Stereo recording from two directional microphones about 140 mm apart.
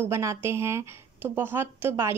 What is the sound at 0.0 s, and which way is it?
Speech, 20° right (ahead or behind).